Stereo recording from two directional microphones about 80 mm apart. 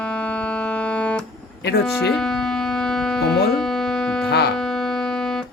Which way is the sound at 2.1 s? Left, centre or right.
Centre.